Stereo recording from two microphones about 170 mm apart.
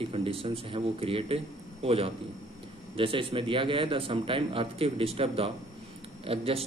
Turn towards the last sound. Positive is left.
turn(degrees=-35)  # may be behind; listen again after turning